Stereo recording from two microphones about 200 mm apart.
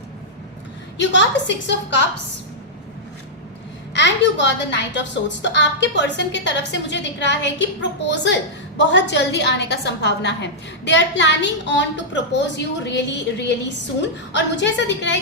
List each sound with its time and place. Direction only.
0.9 s a woman's voice: 60° left (ahead or behind)
3.9 s a woman's voice: 60° left (ahead or behind)